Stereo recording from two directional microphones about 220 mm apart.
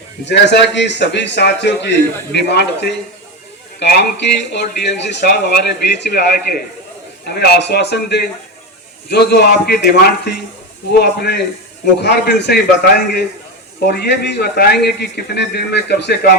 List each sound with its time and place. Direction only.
0.3 s speech: 50° left (ahead or behind)